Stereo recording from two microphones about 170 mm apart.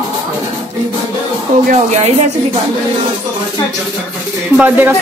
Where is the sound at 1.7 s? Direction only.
45° right (ahead or behind).